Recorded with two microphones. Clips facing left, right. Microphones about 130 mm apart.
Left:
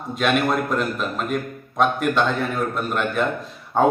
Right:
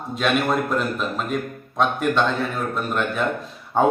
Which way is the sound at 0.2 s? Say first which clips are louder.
Left 1 dB; centre (ahead or behind).